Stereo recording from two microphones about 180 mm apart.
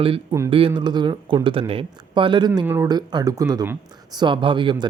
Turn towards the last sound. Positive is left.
turn(degrees=-25)  # may be behind; listen again after turning